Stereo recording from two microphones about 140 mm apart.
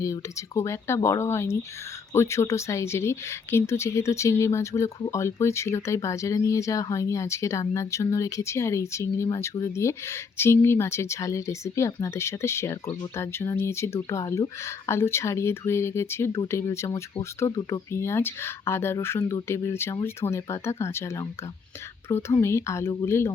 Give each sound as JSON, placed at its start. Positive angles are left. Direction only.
{"t": 0.0, "sound": "speech", "side_deg": 20}
{"t": 4.9, "sound": "speech", "side_deg": 30}
{"t": 5.2, "sound": "speech", "side_deg": 20}